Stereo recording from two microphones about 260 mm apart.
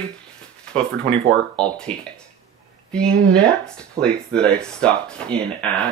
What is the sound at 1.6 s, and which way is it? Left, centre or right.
Speech, centre.